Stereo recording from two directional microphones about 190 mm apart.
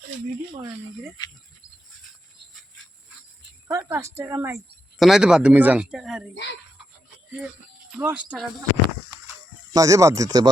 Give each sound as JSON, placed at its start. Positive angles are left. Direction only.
{"t": 3.7, "sound": "a woman's voice", "side_deg": -15}
{"t": 4.9, "sound": "speech", "side_deg": 0}
{"t": 6.3, "sound": "speech", "side_deg": 70}
{"t": 7.9, "sound": "a woman's voice", "side_deg": -5}
{"t": 9.7, "sound": "a woman's voice", "side_deg": -15}